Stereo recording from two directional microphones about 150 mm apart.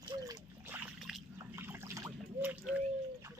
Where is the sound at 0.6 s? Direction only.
15° right (ahead or behind).